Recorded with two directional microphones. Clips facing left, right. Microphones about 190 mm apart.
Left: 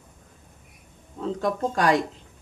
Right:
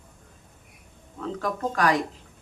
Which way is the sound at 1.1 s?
25° left (ahead or behind).